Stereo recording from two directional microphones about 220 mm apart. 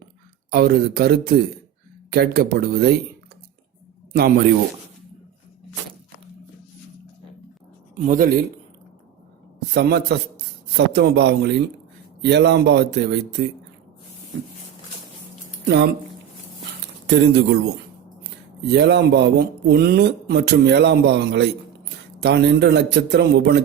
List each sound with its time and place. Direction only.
0.5 s speech: 45° right (ahead or behind)
4.1 s speech: 45° right (ahead or behind)
7.9 s speech: 40° right (ahead or behind)
9.7 s speech: 50° right (ahead or behind)
17.1 s speech: 50° right (ahead or behind)